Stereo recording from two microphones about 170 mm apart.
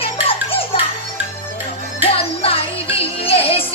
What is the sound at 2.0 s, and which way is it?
Music, 35° left (ahead or behind).